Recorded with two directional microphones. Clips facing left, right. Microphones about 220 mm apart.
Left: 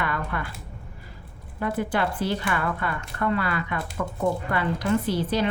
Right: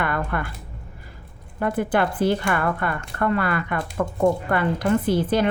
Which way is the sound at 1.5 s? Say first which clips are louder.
Right 4 dB; 50° right (ahead or behind).